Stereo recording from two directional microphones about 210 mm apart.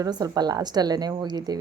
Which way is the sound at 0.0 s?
20° right (ahead or behind).